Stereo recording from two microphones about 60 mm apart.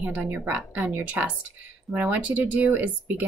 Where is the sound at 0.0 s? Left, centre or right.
Right.